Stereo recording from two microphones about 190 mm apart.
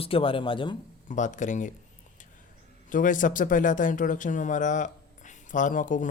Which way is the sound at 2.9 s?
45° left (ahead or behind).